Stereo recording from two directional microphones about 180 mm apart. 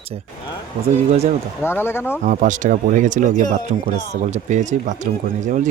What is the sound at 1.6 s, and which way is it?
Speech, 15° left (ahead or behind).